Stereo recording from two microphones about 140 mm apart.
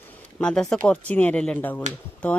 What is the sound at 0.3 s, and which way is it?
Speech, 5° left (ahead or behind).